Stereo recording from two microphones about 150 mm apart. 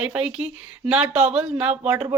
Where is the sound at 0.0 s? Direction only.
5° right (ahead or behind).